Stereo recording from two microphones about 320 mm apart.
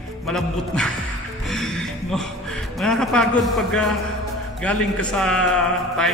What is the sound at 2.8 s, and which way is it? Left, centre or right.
A man's voice, centre.